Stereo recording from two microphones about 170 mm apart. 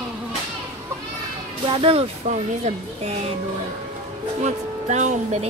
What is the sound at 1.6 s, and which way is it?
Speech, 30° right (ahead or behind).